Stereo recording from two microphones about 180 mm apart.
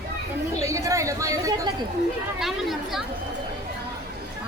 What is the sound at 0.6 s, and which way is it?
Chatter, 15° right (ahead or behind).